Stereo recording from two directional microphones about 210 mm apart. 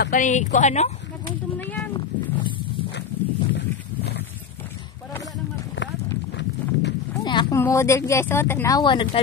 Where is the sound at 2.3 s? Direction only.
25° left (ahead or behind).